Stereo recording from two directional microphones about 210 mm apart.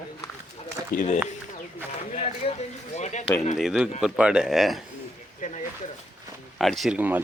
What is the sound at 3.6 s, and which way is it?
Speech, 5° right (ahead or behind).